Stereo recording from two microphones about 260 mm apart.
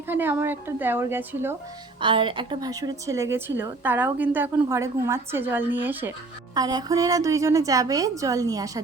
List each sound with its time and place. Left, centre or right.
0.1 s a woman's voice: centre
2.0 s a woman's voice: centre